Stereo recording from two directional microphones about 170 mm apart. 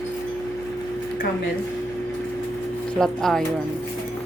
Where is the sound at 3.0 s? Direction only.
Centre (ahead or behind).